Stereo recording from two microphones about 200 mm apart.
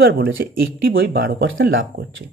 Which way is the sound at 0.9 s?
55° right (ahead or behind).